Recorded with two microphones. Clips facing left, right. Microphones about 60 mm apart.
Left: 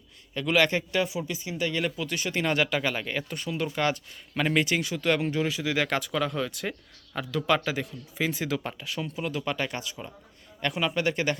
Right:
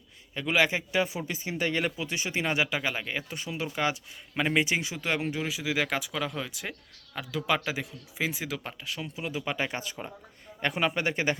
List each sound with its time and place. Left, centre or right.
0.3 s speech: centre
1.3 s a man's voice: right